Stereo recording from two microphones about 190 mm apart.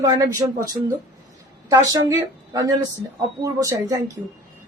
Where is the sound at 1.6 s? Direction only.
20° right (ahead or behind).